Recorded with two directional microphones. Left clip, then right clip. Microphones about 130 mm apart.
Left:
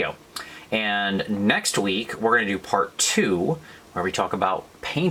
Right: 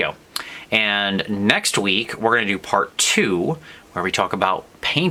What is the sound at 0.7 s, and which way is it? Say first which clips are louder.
Speech: right 5 dB; 35° right (ahead or behind).